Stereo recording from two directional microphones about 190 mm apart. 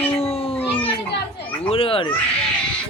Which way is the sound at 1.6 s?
30° left (ahead or behind).